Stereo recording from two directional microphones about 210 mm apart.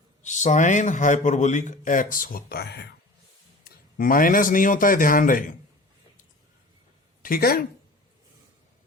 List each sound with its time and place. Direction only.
0.2 s a man's voice: 35° left (ahead or behind); by 2.9 s 50° left (ahead or behind)
3.6 s speech: 40° left (ahead or behind)
7.2 s speech: 45° left (ahead or behind)